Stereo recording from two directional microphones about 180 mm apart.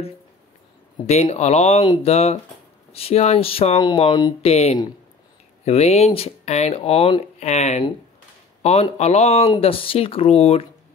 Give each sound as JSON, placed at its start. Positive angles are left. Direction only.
{"t": 1.0, "sound": "speech", "side_deg": 40}
{"t": 4.4, "sound": "speech", "side_deg": 35}
{"t": 8.9, "sound": "speech", "side_deg": 40}